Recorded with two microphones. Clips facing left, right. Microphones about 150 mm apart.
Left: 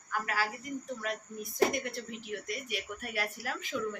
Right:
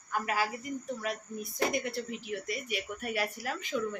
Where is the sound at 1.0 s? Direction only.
5° right (ahead or behind).